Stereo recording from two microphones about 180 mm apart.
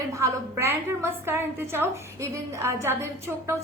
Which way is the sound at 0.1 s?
15° right (ahead or behind).